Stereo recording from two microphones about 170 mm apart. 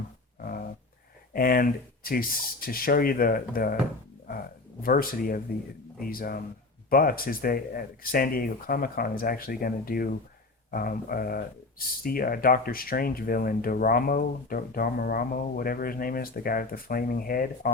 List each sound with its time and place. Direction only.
1.3 s speech: 60° left (ahead or behind)
4.8 s speech: 60° left (ahead or behind)